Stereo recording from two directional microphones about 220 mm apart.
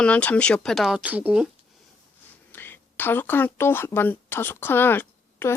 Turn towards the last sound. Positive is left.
turn(degrees=10)  # may be behind; listen again after turning